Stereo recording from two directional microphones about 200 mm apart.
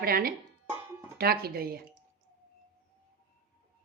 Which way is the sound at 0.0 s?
50° right (ahead or behind).